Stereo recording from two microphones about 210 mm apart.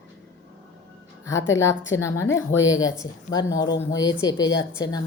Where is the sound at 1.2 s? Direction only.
15° left (ahead or behind).